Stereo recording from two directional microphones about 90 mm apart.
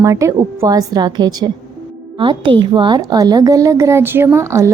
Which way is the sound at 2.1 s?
70° right (ahead or behind).